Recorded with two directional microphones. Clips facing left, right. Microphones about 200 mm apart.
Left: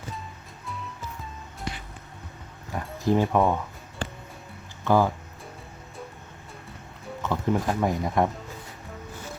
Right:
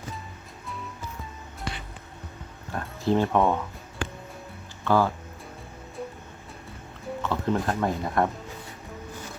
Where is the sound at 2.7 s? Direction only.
10° left (ahead or behind).